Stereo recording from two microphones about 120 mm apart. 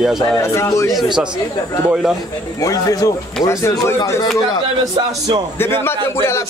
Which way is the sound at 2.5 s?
30° left (ahead or behind).